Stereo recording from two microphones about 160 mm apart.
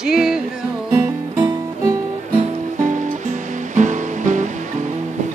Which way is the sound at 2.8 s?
50° right (ahead or behind).